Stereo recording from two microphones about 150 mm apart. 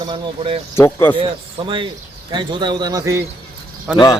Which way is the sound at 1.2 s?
35° right (ahead or behind).